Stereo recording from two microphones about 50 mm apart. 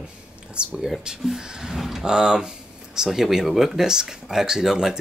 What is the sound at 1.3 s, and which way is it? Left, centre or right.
Speech, centre.